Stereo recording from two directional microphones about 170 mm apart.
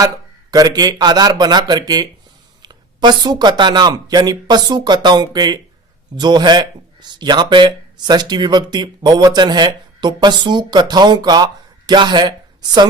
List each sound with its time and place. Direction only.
0.5 s a man's voice: 20° right (ahead or behind)
2.6 s a sound: 25° right (ahead or behind)
3.6 s a man's voice: 25° right (ahead or behind)